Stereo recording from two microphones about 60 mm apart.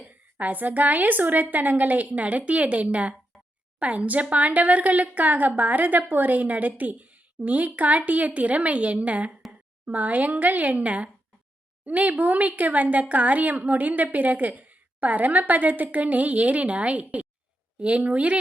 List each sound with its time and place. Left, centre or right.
0.0 s speech: right